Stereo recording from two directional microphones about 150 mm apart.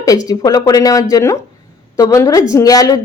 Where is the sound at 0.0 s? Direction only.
25° left (ahead or behind).